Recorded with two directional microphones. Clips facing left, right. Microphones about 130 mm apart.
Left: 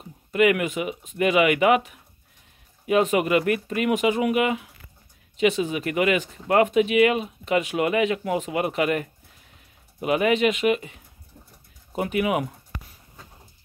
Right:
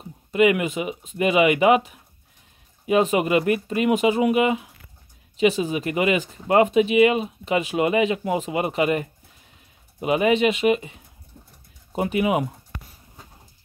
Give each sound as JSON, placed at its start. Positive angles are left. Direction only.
{"t": 0.0, "sound": "a sound", "side_deg": -25}
{"t": 1.1, "sound": "speech", "side_deg": -25}
{"t": 11.9, "sound": "speech", "side_deg": -25}